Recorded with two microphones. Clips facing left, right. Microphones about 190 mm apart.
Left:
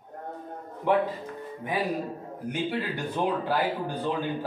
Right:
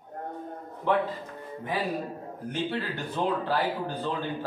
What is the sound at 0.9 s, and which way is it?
Speech, 15° left (ahead or behind).